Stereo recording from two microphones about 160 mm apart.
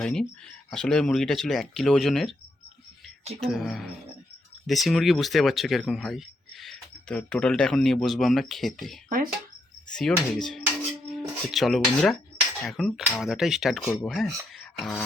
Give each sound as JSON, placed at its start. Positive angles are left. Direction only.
{"t": 0.0, "sound": "speech", "side_deg": 5}
{"t": 3.4, "sound": "speech", "side_deg": 0}
{"t": 9.0, "sound": "speech", "side_deg": -65}
{"t": 9.9, "sound": "speech", "side_deg": 5}